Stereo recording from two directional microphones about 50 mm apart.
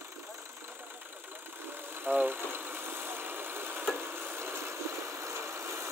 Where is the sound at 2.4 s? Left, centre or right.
Right.